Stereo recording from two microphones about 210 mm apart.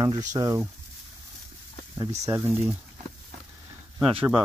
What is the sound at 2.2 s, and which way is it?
Speech, 15° right (ahead or behind).